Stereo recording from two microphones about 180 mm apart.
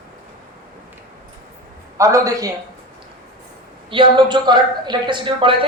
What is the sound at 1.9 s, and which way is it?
Speech, 20° right (ahead or behind).